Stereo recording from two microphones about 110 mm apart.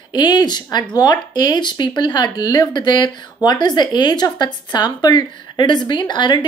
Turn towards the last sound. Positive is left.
turn(degrees=45)  # may be behind; listen again after turning